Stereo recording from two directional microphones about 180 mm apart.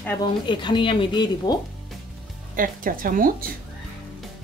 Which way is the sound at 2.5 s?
50° right (ahead or behind).